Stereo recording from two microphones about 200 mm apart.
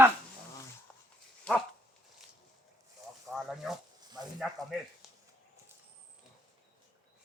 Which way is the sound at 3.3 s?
Centre (ahead or behind).